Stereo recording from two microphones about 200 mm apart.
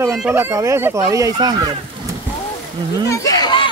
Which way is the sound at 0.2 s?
10° right (ahead or behind).